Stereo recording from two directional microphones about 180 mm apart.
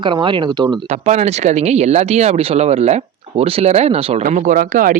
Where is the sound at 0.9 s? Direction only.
40° right (ahead or behind).